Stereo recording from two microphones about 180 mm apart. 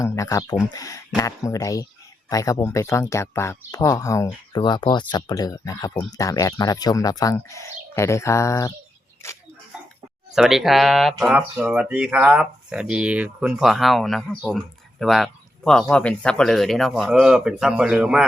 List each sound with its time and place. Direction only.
0.0 s speech: 15° left (ahead or behind)
9.7 s a sound: 5° right (ahead or behind)
10.3 s speech: centre (ahead or behind)